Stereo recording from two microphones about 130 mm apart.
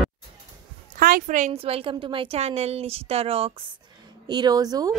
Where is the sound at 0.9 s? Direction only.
90° right.